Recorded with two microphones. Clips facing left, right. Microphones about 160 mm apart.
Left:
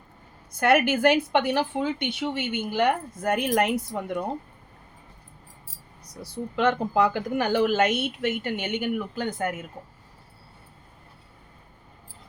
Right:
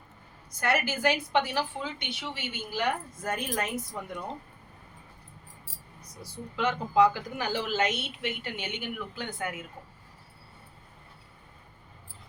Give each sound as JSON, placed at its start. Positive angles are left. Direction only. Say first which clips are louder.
{"t": 0.5, "sound": "a woman's voice", "louder": "left 8 dB", "side_deg": 60}
{"t": 3.9, "sound": "a woman's voice", "louder": "left 7 dB", "side_deg": 55}
{"t": 6.6, "sound": "speech", "louder": "left 2 dB", "side_deg": 60}